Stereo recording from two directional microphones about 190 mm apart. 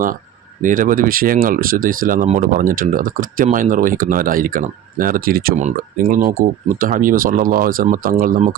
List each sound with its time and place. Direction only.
0.6 s speech: 45° right (ahead or behind)